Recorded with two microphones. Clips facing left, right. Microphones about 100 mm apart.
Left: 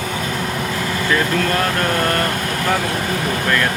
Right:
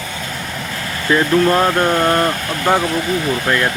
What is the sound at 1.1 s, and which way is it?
Speech, 25° right (ahead or behind).